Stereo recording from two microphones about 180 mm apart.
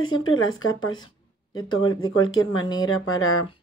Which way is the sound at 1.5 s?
25° left (ahead or behind).